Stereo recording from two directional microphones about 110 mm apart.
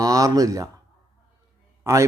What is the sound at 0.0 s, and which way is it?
Speech, 35° right (ahead or behind).